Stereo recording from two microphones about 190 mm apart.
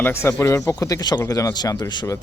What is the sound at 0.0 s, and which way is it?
Speech, 15° left (ahead or behind).